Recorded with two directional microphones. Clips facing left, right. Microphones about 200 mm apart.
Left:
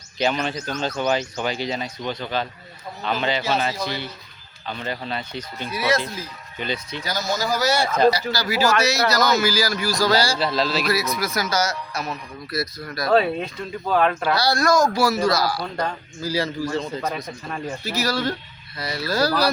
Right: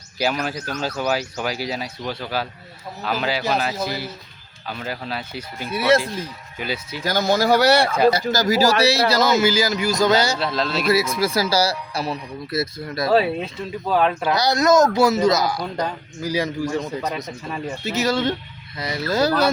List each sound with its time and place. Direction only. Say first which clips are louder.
0.2 s speech: even; 5° right (ahead or behind)
7.0 s speech: right 8 dB; 55° right (ahead or behind)
8.3 s speech: right 3 dB; 45° right (ahead or behind); by 10.3 s 20° right (ahead or behind)
10.3 s speech: left 1 dB; centre (ahead or behind)
10.8 s speech: right 4 dB; 30° right (ahead or behind)
13.1 s speech: even; 5° right (ahead or behind)
14.2 s a man's voice: right 1 dB; 20° right (ahead or behind)
17.0 s speech: right 1 dB; centre (ahead or behind)
17.8 s speech: right 4 dB; 25° right (ahead or behind)